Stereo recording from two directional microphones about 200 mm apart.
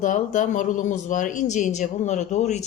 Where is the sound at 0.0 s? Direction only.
40° left (ahead or behind).